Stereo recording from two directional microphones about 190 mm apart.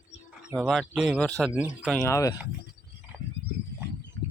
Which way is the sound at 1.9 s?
15° left (ahead or behind).